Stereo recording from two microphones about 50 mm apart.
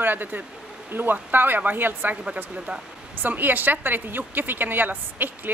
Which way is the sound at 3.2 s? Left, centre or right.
Right.